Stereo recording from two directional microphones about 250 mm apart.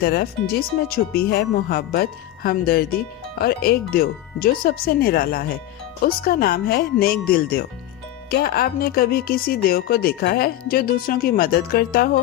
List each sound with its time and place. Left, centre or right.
0.0 s speech: left